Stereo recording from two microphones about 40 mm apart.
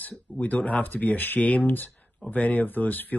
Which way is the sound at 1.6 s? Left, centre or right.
Left.